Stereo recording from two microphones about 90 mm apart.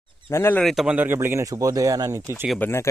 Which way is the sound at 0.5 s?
Centre (ahead or behind).